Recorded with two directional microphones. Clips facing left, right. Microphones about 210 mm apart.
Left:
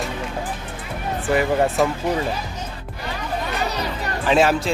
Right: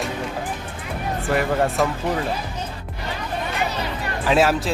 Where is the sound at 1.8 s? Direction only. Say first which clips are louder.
Left 2 dB; centre (ahead or behind).